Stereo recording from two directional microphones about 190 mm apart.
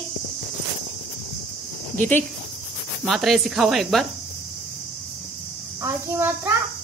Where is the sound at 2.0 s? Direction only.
10° left (ahead or behind).